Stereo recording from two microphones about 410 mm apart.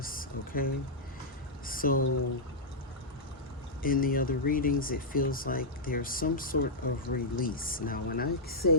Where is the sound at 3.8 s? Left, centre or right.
Left.